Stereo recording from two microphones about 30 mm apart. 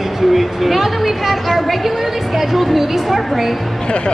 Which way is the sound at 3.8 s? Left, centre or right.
Left.